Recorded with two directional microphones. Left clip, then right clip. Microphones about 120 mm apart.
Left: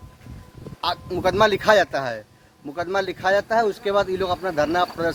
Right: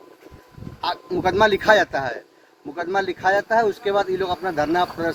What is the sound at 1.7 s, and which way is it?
Speech, 35° left (ahead or behind).